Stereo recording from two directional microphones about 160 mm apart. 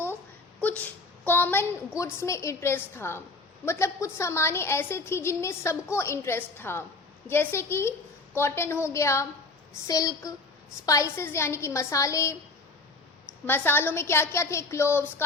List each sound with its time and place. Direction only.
0.6 s whimper: 10° left (ahead or behind)
1.3 s a woman's voice: 15° left (ahead or behind)
13.5 s a woman's voice: 15° left (ahead or behind)